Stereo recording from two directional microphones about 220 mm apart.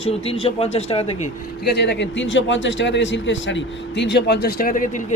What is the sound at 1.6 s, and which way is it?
A man's voice, 50° left (ahead or behind).